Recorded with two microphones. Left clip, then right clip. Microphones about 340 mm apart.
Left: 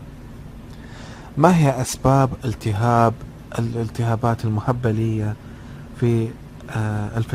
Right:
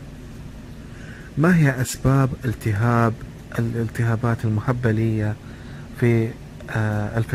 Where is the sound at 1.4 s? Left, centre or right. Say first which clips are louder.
Left 4 dB; centre.